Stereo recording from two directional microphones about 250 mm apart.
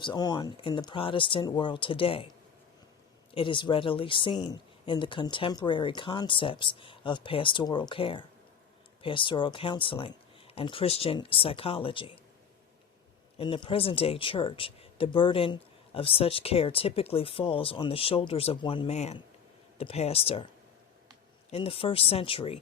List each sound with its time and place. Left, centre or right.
0.0 s speech: centre
3.3 s speech: centre
13.4 s speech: left
21.5 s speech: left